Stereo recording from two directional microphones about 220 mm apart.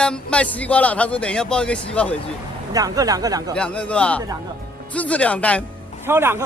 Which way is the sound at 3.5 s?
5° left (ahead or behind).